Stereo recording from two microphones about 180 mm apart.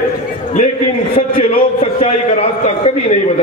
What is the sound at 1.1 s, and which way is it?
A man's voice, 30° left (ahead or behind).